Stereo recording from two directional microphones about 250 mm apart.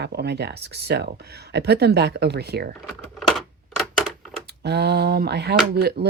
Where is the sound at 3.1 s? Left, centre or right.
Centre.